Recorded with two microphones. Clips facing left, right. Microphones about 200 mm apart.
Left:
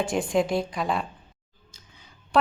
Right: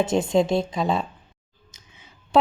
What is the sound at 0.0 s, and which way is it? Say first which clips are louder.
A woman's voice: right 4 dB; 25° right (ahead or behind).